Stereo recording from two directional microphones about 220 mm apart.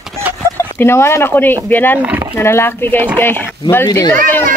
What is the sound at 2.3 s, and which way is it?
Speech, 10° left (ahead or behind).